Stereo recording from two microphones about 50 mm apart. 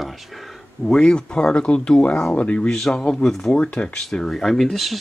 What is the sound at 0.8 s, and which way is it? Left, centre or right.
Speech, centre.